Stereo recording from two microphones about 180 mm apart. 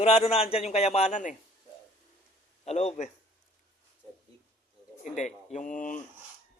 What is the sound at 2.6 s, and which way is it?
Speech, 35° left (ahead or behind).